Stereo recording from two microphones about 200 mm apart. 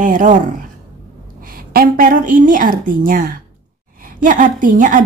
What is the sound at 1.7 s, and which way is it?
A woman's voice, 45° right (ahead or behind).